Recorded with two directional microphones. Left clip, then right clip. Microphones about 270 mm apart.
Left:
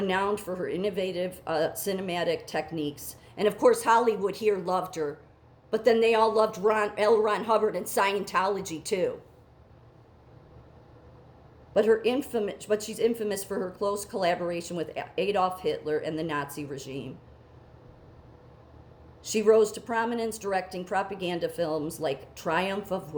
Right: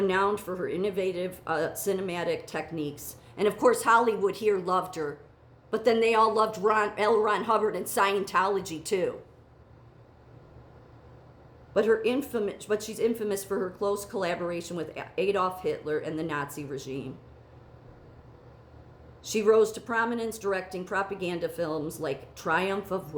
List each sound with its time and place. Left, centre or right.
0.0 s speech: centre
11.7 s speech: centre
19.2 s speech: centre